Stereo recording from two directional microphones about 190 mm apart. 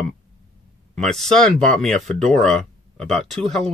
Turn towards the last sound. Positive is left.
turn(degrees=0)  # may be behind; listen again after turning